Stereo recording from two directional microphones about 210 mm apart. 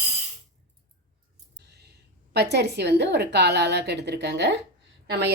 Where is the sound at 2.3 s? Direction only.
50° right (ahead or behind).